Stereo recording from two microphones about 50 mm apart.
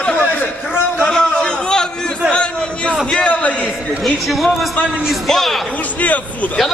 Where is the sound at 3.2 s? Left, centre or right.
Left.